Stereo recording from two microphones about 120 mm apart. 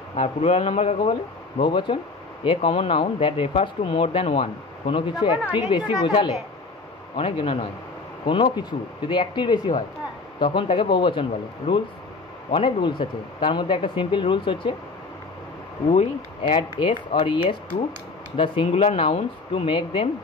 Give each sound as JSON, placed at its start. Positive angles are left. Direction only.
{"t": 0.1, "sound": "speech", "side_deg": 60}
{"t": 1.6, "sound": "speech", "side_deg": 40}
{"t": 15.9, "sound": "speech", "side_deg": 60}